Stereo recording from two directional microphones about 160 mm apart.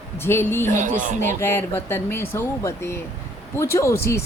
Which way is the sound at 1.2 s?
15° left (ahead or behind).